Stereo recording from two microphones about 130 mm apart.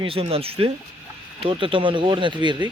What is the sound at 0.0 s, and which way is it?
Speech, 45° right (ahead or behind).